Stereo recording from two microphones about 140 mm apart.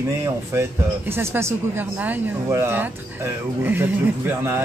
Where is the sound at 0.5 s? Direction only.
20° right (ahead or behind).